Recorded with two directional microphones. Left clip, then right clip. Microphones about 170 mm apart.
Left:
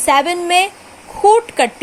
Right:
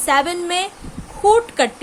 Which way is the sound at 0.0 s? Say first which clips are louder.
Left 4 dB; 15° left (ahead or behind).